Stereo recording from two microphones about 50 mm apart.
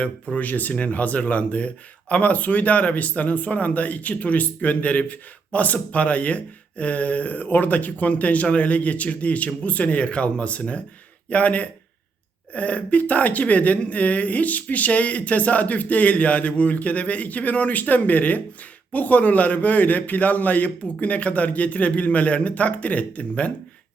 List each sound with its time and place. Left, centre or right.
0.0 s speech: left